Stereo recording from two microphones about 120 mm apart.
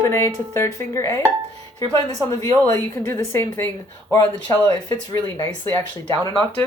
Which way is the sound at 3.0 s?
20° left (ahead or behind).